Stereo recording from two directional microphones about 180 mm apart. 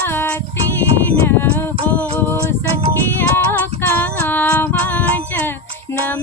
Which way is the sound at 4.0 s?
10° left (ahead or behind).